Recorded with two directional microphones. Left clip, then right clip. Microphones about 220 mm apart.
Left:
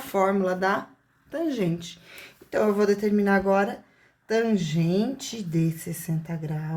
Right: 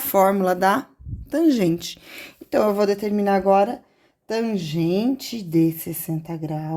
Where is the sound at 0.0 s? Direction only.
50° right (ahead or behind).